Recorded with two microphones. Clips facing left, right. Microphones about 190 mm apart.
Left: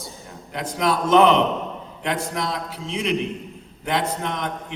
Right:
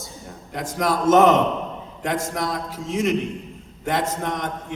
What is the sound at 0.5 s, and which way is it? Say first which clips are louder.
A man's voice: even; 45° right (ahead or behind).